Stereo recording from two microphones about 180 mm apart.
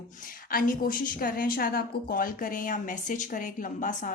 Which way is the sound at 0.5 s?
50° left (ahead or behind).